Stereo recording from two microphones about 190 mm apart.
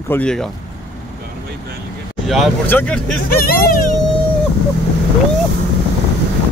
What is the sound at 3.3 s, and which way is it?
Speech, 50° left (ahead or behind).